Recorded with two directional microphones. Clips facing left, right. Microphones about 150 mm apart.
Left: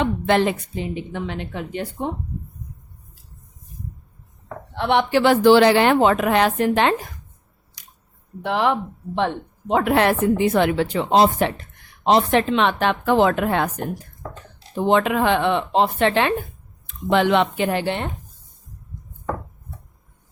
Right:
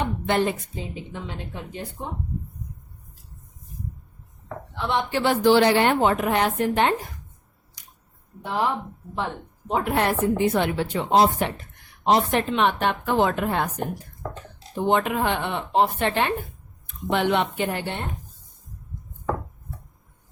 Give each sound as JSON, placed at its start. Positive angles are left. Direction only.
{"t": 0.0, "sound": "a woman's voice", "side_deg": 90}
{"t": 4.7, "sound": "a woman's voice", "side_deg": 65}
{"t": 7.8, "sound": "a sound", "side_deg": 90}
{"t": 8.4, "sound": "a woman's voice", "side_deg": 80}
{"t": 14.8, "sound": "a woman's voice", "side_deg": 90}